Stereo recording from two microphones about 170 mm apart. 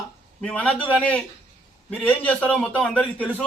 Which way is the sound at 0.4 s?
10° left (ahead or behind).